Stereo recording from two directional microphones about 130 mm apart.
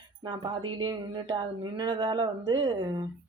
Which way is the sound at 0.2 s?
35° right (ahead or behind).